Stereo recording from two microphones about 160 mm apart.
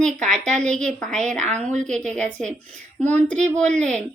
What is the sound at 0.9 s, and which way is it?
Speech, 5° left (ahead or behind).